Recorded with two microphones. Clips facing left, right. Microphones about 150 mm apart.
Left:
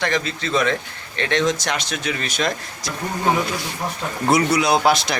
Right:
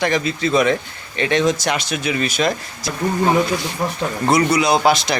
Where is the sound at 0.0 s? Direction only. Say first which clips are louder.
Right 4 dB; 10° right (ahead or behind).